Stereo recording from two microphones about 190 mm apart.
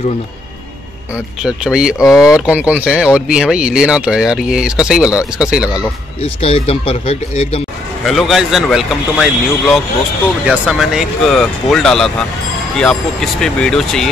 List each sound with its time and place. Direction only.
1.4 s speech: 5° right (ahead or behind)
6.2 s speech: 30° left (ahead or behind)
8.0 s speech: centre (ahead or behind)